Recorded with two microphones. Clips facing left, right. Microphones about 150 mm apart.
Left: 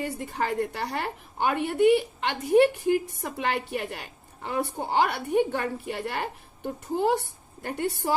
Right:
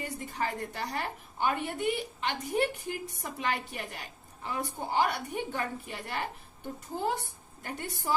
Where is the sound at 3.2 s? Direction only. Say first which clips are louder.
Left 5 dB; 60° left (ahead or behind).